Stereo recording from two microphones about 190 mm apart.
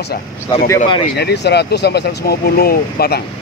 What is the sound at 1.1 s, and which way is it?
Speech, 60° left (ahead or behind).